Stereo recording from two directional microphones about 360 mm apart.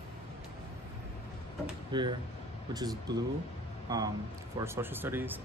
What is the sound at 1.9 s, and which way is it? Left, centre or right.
Speech, centre.